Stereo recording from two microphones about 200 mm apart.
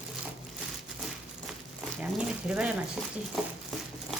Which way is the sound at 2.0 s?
5° right (ahead or behind).